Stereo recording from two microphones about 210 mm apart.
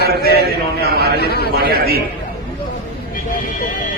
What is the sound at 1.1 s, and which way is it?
Music, 50° left (ahead or behind).